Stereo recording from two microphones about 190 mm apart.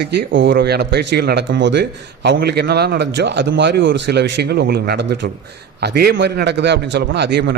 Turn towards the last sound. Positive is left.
turn(degrees=-60)  # may be behind; listen again after turning